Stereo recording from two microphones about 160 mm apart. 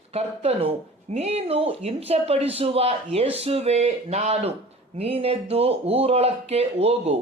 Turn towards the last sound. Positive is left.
turn(degrees=-40)  # may be behind; listen again after turning